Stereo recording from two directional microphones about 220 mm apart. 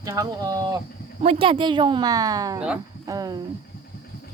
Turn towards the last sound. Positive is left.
turn(degrees=-15)  # may be behind; listen again after turning